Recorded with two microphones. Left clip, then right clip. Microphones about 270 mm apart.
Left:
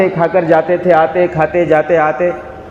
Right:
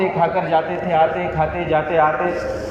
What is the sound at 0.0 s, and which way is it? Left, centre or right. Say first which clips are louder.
A man's voice: left 6 dB; left.